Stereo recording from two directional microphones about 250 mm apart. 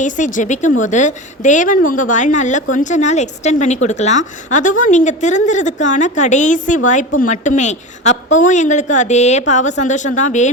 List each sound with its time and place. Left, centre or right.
0.0 s a woman's voice: left